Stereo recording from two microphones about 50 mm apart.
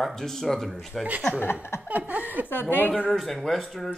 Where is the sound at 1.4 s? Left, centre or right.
Left.